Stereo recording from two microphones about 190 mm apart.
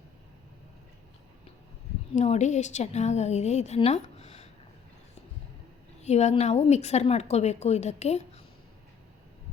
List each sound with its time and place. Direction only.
2.1 s a woman's voice: 35° left (ahead or behind)
6.0 s a woman's voice: 35° left (ahead or behind)